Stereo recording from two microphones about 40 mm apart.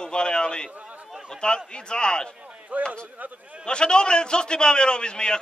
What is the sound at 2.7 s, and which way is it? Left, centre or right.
Speech, right.